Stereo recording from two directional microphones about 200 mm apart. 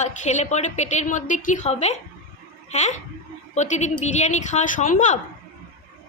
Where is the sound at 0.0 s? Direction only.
35° left (ahead or behind).